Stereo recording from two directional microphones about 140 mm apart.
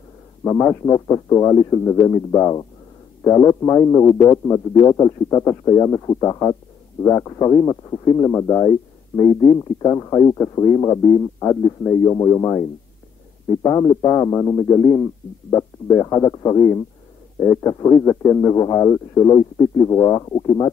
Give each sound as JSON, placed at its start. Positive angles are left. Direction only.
{"t": 0.4, "sound": "speech", "side_deg": 25}